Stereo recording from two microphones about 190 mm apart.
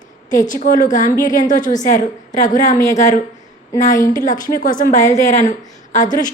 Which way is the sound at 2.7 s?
15° left (ahead or behind).